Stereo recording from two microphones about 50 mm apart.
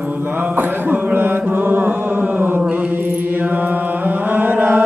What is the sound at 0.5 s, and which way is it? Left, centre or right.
Mantra, right.